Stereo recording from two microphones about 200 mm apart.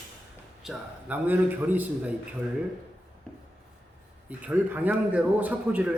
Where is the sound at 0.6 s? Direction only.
5° right (ahead or behind).